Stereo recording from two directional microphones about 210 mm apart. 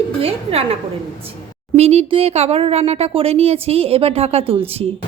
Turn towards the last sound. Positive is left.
turn(degrees=-30)  # may be behind; listen again after turning